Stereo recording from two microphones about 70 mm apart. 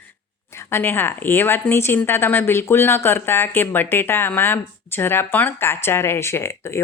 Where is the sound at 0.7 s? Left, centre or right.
Left.